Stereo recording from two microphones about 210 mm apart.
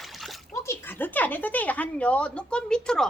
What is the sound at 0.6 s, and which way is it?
Speech, 10° left (ahead or behind).